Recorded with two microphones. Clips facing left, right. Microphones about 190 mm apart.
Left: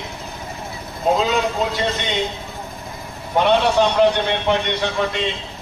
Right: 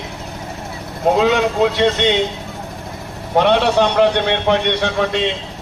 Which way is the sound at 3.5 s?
70° right (ahead or behind).